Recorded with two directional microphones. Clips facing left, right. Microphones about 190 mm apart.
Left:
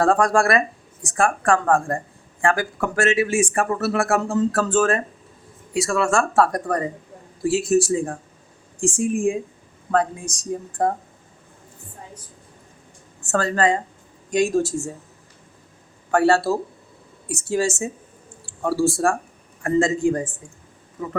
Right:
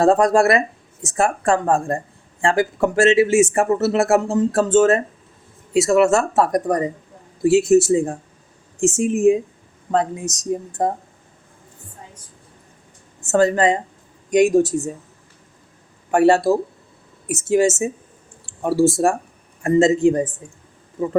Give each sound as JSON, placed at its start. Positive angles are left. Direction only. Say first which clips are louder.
{"t": 0.0, "sound": "speech", "louder": "right 4 dB", "side_deg": -25}
{"t": 13.2, "sound": "speech", "louder": "right 4 dB", "side_deg": -20}
{"t": 16.1, "sound": "speech", "louder": "right 3 dB", "side_deg": -20}